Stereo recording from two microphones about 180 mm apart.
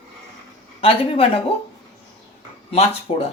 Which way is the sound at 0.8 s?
30° left (ahead or behind).